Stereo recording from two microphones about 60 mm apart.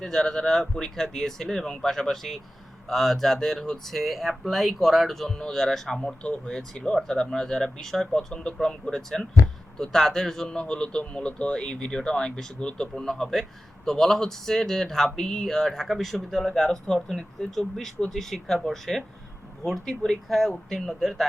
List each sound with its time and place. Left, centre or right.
0.0 s speech: centre
6.2 s speech: centre